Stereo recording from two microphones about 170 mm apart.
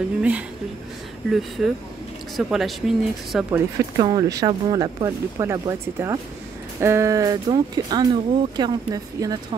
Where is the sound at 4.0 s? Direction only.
25° right (ahead or behind).